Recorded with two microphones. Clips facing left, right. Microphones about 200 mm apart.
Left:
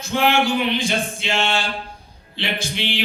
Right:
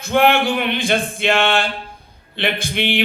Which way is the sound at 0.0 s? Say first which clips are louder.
Right 4 dB; 55° right (ahead or behind).